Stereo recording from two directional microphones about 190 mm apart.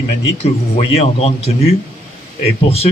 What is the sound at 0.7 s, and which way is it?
Speech, 35° left (ahead or behind).